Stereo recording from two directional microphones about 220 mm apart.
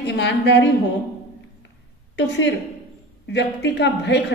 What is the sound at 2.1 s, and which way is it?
A woman's voice, 55° left (ahead or behind).